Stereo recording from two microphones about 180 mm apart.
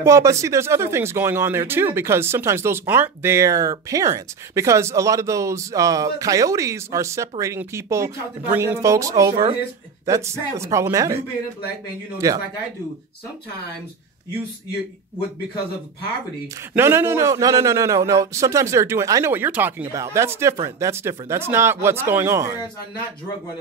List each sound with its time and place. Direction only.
0.0 s speech: 15° right (ahead or behind)
12.2 s speech: 15° right (ahead or behind)
16.7 s speech: 15° right (ahead or behind)